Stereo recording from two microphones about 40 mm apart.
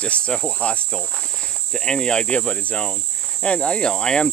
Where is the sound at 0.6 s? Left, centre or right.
Left.